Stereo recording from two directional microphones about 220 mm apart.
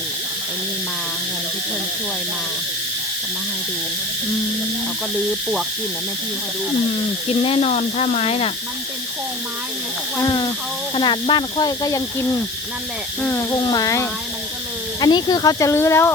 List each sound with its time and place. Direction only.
7.3 s speech: 25° left (ahead or behind)
10.2 s speech: 20° left (ahead or behind)
13.2 s speech: 15° left (ahead or behind)